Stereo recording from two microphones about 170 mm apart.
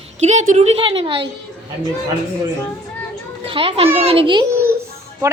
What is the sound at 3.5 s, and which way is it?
A woman's voice, 35° right (ahead or behind).